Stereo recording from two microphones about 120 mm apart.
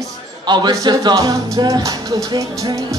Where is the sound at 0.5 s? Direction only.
40° right (ahead or behind).